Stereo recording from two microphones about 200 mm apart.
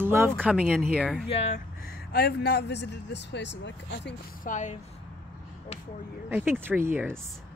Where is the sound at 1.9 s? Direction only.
50° left (ahead or behind).